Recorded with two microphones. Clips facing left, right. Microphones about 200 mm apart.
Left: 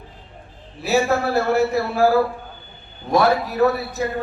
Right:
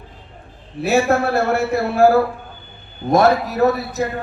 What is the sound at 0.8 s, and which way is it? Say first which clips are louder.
A man's voice: right 3 dB; 50° right (ahead or behind).